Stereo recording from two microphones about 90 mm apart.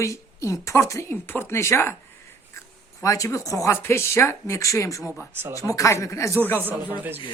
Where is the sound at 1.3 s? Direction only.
25° left (ahead or behind).